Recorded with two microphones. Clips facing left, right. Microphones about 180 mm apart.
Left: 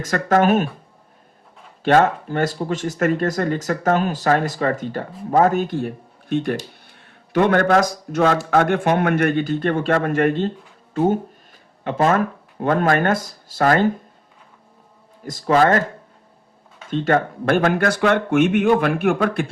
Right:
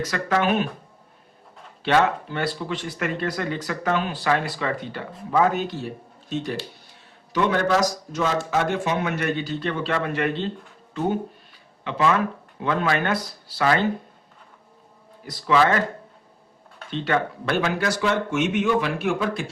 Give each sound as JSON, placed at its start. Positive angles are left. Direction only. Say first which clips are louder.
{"t": 0.0, "sound": "speech", "louder": "left 6 dB", "side_deg": 50}
{"t": 1.8, "sound": "speech", "louder": "left 5 dB", "side_deg": 45}
{"t": 6.8, "sound": "a sound", "louder": "left 1 dB", "side_deg": 55}
{"t": 8.4, "sound": "speech", "louder": "left 6 dB", "side_deg": 60}
{"t": 11.8, "sound": "speech", "louder": "left 4 dB", "side_deg": 45}
{"t": 15.2, "sound": "speech", "louder": "left 4 dB", "side_deg": 45}
{"t": 16.9, "sound": "speech", "louder": "left 5 dB", "side_deg": 45}